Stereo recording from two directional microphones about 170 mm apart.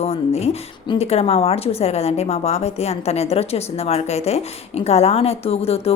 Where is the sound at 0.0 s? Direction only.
40° left (ahead or behind).